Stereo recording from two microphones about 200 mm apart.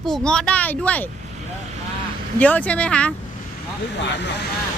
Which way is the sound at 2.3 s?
10° left (ahead or behind).